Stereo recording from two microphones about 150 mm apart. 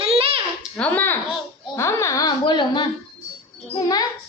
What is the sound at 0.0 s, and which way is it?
Babbling, 40° right (ahead or behind).